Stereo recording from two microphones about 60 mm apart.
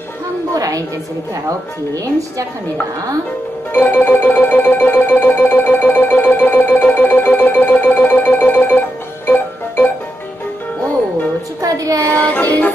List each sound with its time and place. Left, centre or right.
0.6 s a sound: right
3.7 s music: left
11.6 s child singing: right
12.4 s music: left